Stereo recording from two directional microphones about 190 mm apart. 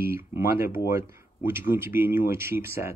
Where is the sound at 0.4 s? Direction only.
10° right (ahead or behind).